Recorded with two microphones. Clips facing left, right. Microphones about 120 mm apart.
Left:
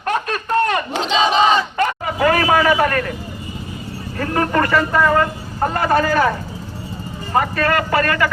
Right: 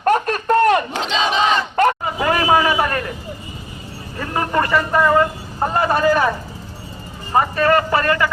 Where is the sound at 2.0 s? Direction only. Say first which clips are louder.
Left 2 dB; 25° right (ahead or behind).